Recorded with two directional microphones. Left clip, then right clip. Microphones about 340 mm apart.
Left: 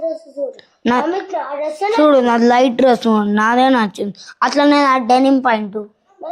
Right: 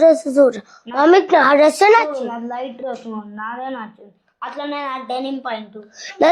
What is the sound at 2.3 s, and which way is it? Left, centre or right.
Speech, left.